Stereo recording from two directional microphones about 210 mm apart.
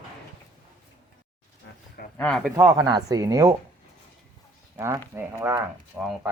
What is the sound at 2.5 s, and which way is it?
Speech, 20° right (ahead or behind).